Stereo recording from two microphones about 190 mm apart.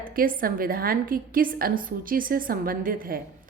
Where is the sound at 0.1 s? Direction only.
50° right (ahead or behind).